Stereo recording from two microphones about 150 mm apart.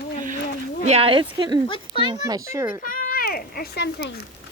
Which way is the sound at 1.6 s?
35° left (ahead or behind).